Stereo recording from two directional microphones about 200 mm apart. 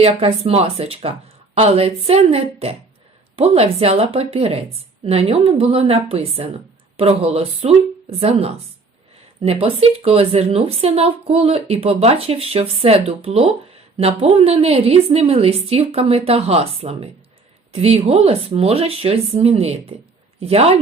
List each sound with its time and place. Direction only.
0.0 s a woman's voice: 30° right (ahead or behind)